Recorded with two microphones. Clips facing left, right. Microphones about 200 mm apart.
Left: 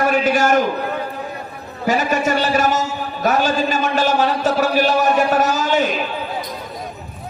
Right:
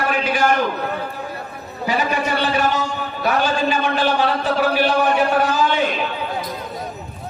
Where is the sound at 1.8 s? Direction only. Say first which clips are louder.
Left 3 dB; 45° left (ahead or behind).